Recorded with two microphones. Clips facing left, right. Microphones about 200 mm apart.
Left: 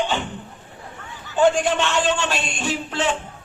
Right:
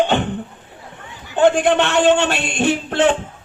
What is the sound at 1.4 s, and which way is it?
A man's voice, 60° right (ahead or behind).